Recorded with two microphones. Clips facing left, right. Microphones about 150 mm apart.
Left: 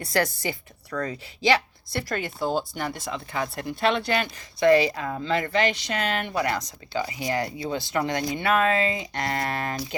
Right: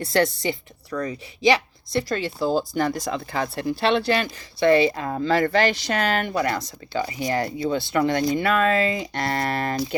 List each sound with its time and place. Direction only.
0.0 s a woman's voice: 25° right (ahead or behind)
5.0 s a woman's voice: 40° right (ahead or behind)